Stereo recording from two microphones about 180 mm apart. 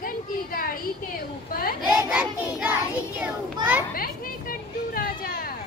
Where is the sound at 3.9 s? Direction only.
55° left (ahead or behind).